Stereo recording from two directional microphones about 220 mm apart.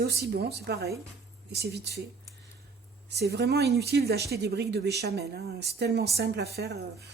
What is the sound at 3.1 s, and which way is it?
A woman's voice, 50° right (ahead or behind).